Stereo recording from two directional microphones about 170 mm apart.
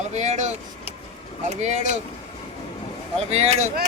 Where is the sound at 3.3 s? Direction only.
40° right (ahead or behind).